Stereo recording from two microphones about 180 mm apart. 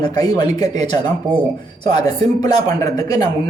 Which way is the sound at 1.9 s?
20° left (ahead or behind).